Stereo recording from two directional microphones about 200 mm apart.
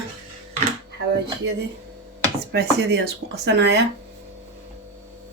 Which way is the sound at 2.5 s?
55° right (ahead or behind).